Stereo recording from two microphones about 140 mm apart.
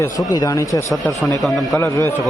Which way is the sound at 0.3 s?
25° left (ahead or behind).